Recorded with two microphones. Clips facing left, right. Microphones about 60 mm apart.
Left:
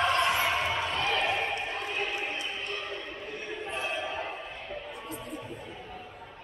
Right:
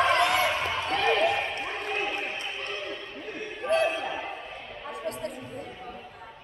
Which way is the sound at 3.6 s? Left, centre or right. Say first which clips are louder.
Right 10 dB; right.